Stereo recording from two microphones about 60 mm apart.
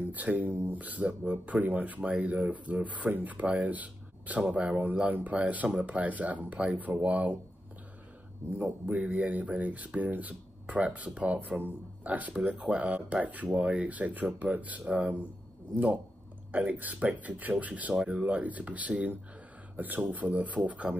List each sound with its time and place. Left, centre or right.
0.1 s speech: right
8.5 s speech: right